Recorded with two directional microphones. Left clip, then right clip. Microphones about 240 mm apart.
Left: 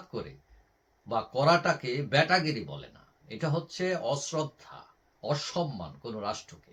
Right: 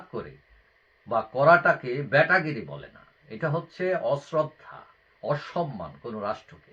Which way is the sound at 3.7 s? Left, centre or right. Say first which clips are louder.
Right 5 dB; centre.